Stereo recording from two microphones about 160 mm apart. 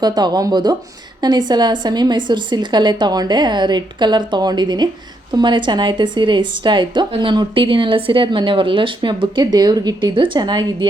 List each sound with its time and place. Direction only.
0.0 s a woman's voice: 25° right (ahead or behind)